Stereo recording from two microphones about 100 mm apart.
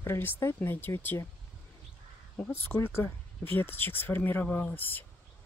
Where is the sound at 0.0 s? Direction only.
25° left (ahead or behind).